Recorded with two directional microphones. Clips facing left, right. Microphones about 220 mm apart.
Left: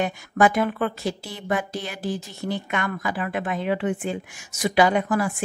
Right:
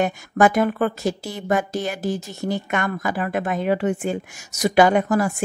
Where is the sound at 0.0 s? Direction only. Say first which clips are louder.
Right 3 dB; 45° right (ahead or behind).